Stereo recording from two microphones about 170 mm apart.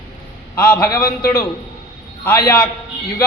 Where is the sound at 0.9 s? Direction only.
20° left (ahead or behind).